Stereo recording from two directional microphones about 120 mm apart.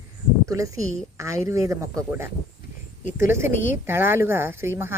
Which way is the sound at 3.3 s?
20° right (ahead or behind).